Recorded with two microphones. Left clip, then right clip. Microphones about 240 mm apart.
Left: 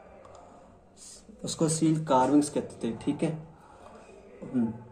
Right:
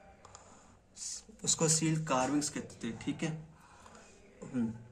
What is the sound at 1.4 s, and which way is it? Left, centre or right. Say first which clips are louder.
Speech: left 4 dB; right.